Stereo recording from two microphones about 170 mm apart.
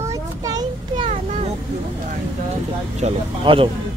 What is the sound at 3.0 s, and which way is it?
Speech, 30° right (ahead or behind).